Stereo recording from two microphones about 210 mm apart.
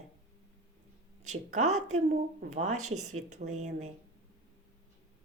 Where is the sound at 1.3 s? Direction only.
35° right (ahead or behind).